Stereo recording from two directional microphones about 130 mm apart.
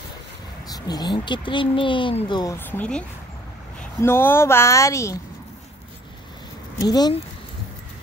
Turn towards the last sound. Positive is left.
turn(degrees=30)  # may be behind; listen again after turning